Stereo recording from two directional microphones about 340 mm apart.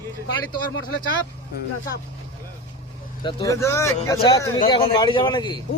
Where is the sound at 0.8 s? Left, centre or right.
Left.